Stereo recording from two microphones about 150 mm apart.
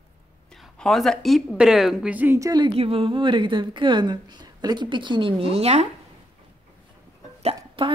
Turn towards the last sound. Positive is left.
turn(degrees=-35)  # may be behind; listen again after turning